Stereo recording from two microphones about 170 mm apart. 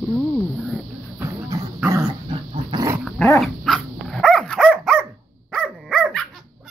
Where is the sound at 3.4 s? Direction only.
Centre (ahead or behind).